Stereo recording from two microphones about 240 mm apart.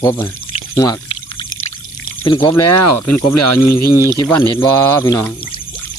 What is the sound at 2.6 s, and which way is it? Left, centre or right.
Speech, left.